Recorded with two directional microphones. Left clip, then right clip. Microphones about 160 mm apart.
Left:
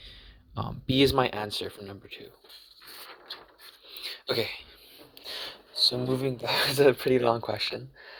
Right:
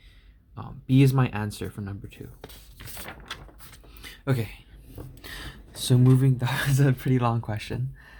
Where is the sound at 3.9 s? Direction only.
30° left (ahead or behind).